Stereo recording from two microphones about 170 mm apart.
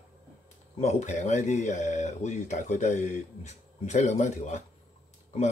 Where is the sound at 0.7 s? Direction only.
40° left (ahead or behind).